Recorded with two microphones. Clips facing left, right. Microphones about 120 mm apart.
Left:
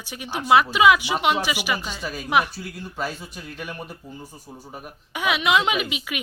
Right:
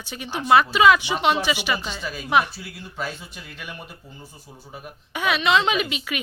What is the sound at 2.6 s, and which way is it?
Speech, 45° left (ahead or behind).